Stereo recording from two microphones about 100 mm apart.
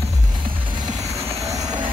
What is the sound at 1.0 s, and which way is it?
Train, 90° right.